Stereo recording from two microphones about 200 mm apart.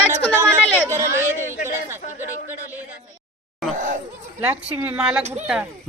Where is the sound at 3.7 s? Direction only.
40° right (ahead or behind).